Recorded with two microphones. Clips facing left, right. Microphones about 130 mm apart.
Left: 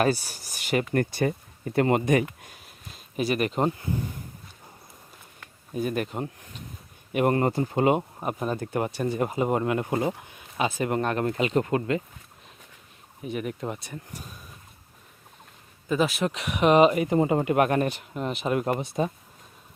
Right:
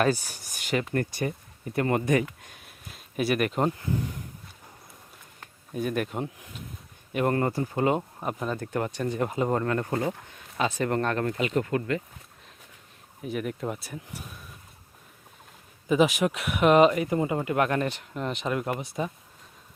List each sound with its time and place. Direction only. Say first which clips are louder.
0.0 s speech: left 1 dB; 10° left (ahead or behind)
1.7 s speech: left 4 dB; 25° left (ahead or behind)
2.2 s a sound: left 3 dB; 5° left (ahead or behind)
5.7 s speech: left 1 dB; centre (ahead or behind)
7.1 s speech: left 3 dB; 15° left (ahead or behind)
13.2 s speech: even; centre (ahead or behind)
15.9 s speech: right 2 dB; 15° right (ahead or behind)
16.3 s speech: even; centre (ahead or behind)
17.1 s speech: left 4 dB; 30° left (ahead or behind)
17.6 s speech: left 3 dB; 15° left (ahead or behind)
18.5 s speech: left 4 dB; 25° left (ahead or behind)